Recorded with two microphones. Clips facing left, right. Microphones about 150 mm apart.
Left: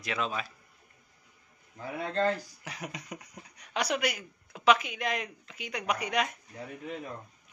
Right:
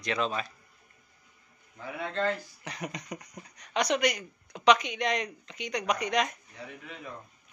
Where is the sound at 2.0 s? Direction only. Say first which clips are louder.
Left 2 dB; 35° left (ahead or behind).